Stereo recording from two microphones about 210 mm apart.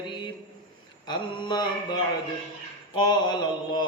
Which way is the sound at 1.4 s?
20° left (ahead or behind).